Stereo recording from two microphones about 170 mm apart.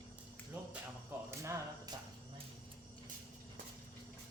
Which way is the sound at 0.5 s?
10° right (ahead or behind).